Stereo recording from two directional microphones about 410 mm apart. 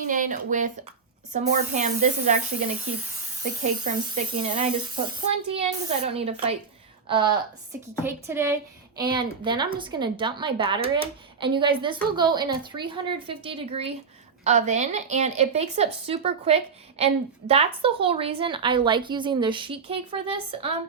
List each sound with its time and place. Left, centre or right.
0.0 s a woman's voice: centre
3.8 s a woman's voice: centre